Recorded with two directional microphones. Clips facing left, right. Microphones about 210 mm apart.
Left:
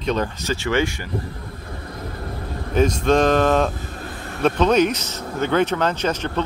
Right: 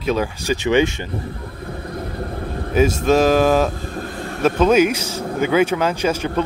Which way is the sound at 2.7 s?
5° right (ahead or behind).